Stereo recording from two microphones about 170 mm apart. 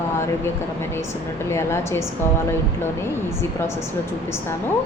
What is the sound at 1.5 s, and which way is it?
Speech, 15° left (ahead or behind).